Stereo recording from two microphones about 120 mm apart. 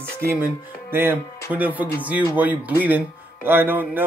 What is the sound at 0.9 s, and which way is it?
Music, 20° right (ahead or behind).